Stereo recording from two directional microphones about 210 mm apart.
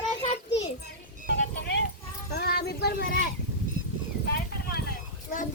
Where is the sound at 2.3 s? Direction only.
50° left (ahead or behind).